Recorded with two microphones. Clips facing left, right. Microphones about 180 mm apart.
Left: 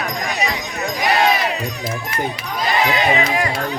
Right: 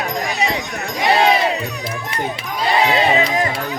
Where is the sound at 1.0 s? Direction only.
30° right (ahead or behind).